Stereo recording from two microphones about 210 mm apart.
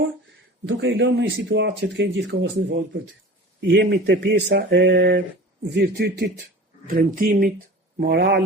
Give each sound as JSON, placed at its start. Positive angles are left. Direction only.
{"t": 0.7, "sound": "speech", "side_deg": -60}